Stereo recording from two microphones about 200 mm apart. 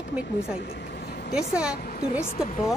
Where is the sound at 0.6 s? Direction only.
55° left (ahead or behind).